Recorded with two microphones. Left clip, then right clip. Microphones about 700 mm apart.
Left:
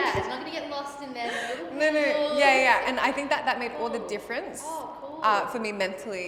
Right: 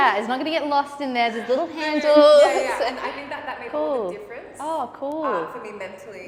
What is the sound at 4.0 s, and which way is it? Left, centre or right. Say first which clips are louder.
A woman's voice: right 2 dB; left.